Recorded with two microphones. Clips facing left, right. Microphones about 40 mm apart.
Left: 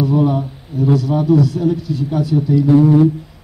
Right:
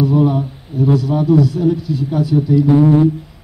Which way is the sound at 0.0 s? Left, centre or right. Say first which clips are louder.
Right 1 dB; centre.